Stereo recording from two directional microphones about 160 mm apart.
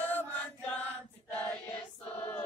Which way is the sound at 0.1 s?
10° left (ahead or behind).